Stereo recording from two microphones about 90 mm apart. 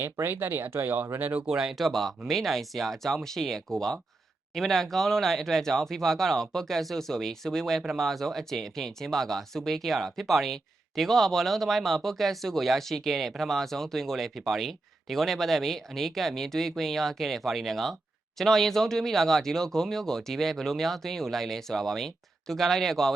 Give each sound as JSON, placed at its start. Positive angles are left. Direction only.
{"t": 0.0, "sound": "speech", "side_deg": -25}
{"t": 1.5, "sound": "speech", "side_deg": -5}